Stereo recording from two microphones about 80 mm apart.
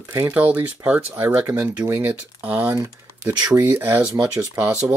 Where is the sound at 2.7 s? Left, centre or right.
Right.